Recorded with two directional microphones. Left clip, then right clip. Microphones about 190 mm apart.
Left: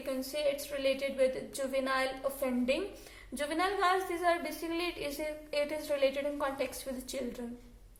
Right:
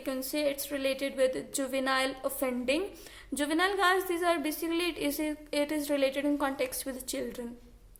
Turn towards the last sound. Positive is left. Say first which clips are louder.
# right 2 dB
turn(degrees=-50)  # may be behind; listen again after turning